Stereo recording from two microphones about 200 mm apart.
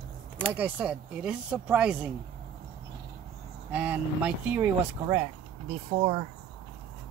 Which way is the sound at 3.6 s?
10° right (ahead or behind).